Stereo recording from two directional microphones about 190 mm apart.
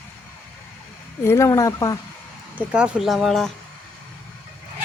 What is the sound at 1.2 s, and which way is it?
Speech, 15° left (ahead or behind).